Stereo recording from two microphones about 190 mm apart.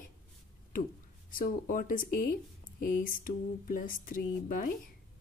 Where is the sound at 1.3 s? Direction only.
50° left (ahead or behind).